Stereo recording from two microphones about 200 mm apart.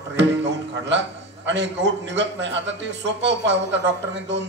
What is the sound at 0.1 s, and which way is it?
A man's voice, 60° right (ahead or behind).